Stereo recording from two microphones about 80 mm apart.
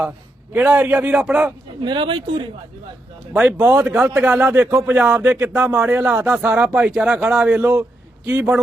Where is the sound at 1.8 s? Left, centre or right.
Right.